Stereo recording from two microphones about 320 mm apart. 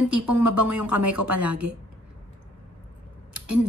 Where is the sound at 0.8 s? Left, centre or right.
Right.